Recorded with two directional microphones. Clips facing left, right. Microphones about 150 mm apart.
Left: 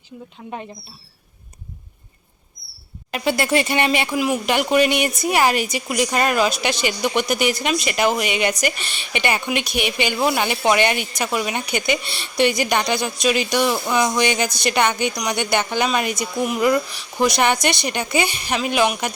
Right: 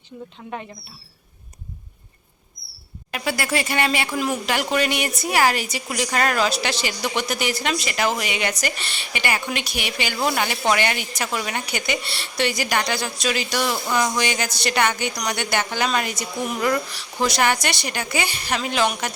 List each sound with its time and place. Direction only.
3.1 s speech: 25° left (ahead or behind)
4.1 s a woman's voice: 10° left (ahead or behind)
4.4 s a woman's voice: 20° left (ahead or behind)